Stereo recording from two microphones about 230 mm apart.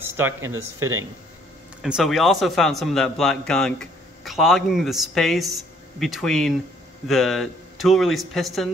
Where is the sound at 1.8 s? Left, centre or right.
Centre.